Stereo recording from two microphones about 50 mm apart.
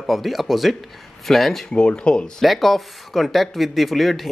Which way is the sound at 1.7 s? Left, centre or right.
Left.